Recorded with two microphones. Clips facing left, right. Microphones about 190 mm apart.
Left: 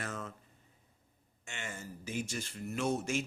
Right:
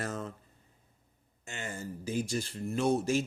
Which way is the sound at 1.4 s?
35° right (ahead or behind).